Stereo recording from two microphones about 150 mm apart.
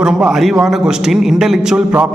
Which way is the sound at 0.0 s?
5° right (ahead or behind).